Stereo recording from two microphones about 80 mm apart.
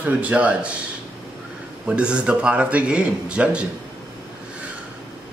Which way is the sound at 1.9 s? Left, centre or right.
Centre.